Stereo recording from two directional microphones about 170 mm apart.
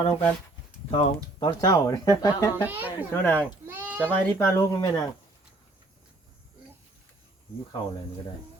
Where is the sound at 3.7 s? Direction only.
10° right (ahead or behind).